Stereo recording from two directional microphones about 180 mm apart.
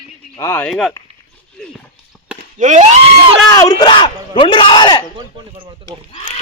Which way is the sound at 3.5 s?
20° left (ahead or behind).